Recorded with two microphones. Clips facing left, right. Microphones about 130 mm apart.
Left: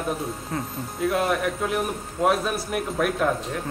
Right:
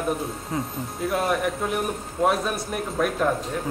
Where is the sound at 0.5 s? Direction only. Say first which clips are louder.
Right 2 dB; 15° right (ahead or behind).